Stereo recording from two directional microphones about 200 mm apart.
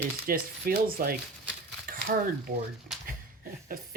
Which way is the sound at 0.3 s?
45° right (ahead or behind).